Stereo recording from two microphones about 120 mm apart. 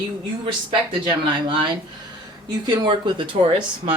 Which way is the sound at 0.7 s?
45° right (ahead or behind).